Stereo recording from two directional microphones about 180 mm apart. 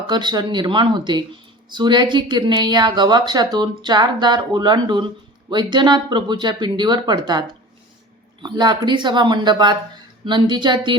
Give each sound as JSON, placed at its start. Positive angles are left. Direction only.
{"t": 0.1, "sound": "speech", "side_deg": -25}